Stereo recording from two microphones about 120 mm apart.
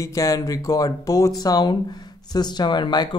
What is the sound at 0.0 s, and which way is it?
Speech, 25° left (ahead or behind).